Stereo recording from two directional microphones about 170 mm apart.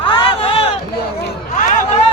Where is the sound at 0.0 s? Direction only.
30° left (ahead or behind).